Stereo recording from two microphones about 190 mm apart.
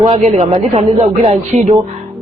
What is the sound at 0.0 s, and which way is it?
A man's voice, 30° right (ahead or behind).